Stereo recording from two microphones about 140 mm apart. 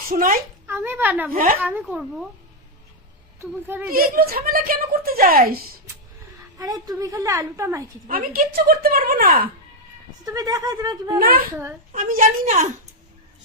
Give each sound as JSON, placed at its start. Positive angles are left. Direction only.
{"t": 0.1, "sound": "a woman's voice", "side_deg": -75}
{"t": 0.7, "sound": "speech", "side_deg": -15}
{"t": 1.3, "sound": "speech", "side_deg": -90}
{"t": 1.5, "sound": "speech", "side_deg": -15}
{"t": 3.4, "sound": "speech", "side_deg": -15}
{"t": 3.9, "sound": "a woman's voice", "side_deg": -90}
{"t": 6.6, "sound": "a woman's voice", "side_deg": -25}
{"t": 8.0, "sound": "a woman's voice", "side_deg": -85}
{"t": 10.2, "sound": "a woman's voice", "side_deg": -25}
{"t": 11.2, "sound": "a woman's voice", "side_deg": -90}
{"t": 11.9, "sound": "a woman's voice", "side_deg": -70}